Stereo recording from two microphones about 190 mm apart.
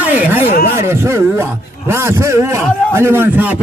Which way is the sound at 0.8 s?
15° right (ahead or behind).